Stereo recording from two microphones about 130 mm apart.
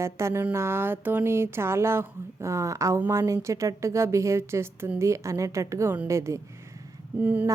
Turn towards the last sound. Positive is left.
turn(degrees=-15)  # may be behind; listen again after turning